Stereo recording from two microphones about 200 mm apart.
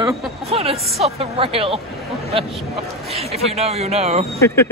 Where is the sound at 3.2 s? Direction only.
30° right (ahead or behind).